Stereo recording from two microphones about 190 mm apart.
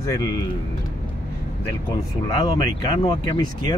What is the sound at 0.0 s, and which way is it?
Speech, 20° left (ahead or behind).